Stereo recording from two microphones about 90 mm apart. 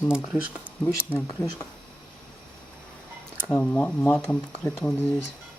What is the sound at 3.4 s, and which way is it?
Speech, 15° left (ahead or behind).